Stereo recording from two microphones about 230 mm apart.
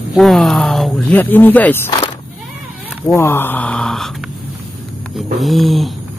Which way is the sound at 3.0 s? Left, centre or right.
Centre.